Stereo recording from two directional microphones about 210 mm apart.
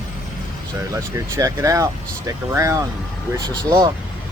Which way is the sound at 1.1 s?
15° right (ahead or behind).